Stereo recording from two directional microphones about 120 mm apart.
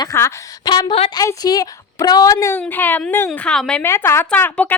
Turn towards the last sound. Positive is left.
turn(degrees=15)  # may be behind; listen again after turning